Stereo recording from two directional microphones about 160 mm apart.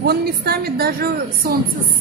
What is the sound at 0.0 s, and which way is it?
A woman's voice, 80° right.